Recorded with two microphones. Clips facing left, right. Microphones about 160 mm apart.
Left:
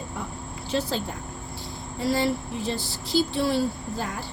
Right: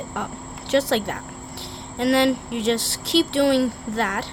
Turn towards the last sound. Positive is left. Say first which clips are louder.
# right 6 dB
turn(degrees=-80)